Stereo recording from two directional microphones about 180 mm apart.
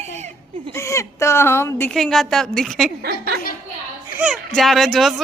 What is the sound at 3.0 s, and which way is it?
Speech, 55° right (ahead or behind).